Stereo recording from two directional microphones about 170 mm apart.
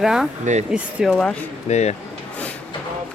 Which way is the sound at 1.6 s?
40° left (ahead or behind).